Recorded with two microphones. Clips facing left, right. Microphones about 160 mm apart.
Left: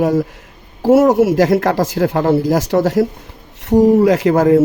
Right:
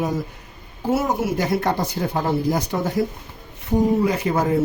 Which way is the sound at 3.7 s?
80° left.